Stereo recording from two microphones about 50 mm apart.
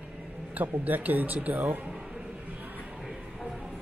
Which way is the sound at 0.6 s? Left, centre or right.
Right.